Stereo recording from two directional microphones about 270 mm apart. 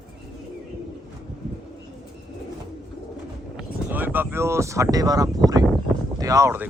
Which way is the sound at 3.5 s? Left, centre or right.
Centre.